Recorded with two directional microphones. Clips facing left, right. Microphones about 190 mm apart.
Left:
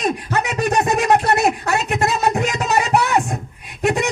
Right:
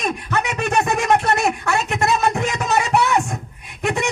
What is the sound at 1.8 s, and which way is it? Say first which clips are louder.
Speech: left 2 dB; 20° left (ahead or behind).